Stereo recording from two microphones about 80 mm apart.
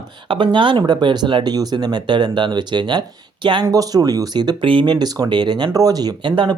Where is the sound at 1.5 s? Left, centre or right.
Right.